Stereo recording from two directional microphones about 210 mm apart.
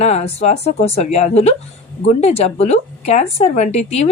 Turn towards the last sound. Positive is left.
turn(degrees=30)  # may be behind; listen again after turning